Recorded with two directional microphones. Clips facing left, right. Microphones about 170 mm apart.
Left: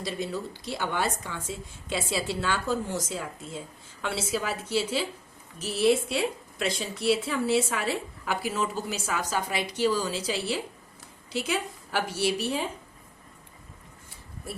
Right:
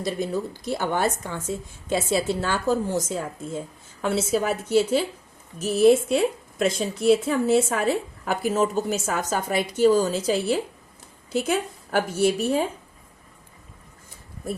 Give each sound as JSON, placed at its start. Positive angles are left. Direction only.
{"t": 0.0, "sound": "a woman's voice", "side_deg": -45}